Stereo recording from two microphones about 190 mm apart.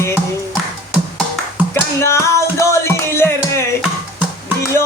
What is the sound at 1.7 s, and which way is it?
Music, 15° left (ahead or behind).